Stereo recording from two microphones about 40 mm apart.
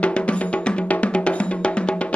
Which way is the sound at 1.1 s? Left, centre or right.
Left.